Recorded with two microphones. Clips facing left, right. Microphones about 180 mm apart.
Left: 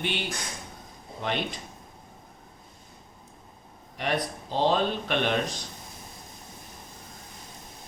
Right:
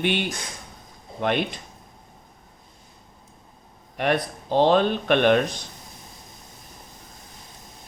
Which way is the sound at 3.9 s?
60° right (ahead or behind).